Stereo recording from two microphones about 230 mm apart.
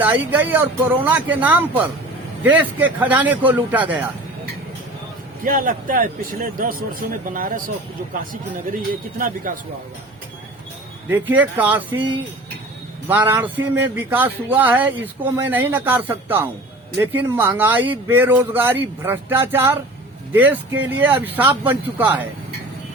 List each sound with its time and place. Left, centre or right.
0.0 s speech: centre
5.5 s speech: right
11.1 s speech: centre
13.1 s speech: centre